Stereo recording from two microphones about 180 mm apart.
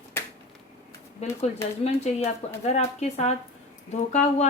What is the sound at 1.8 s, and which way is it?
A woman's voice, 35° left (ahead or behind).